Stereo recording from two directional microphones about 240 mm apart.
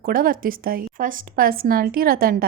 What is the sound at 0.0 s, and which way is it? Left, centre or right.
Speech, right.